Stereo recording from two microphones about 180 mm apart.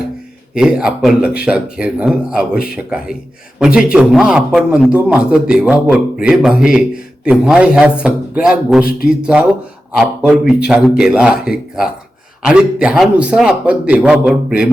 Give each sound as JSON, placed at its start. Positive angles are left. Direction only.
{"t": 0.5, "sound": "a man's voice", "side_deg": -5}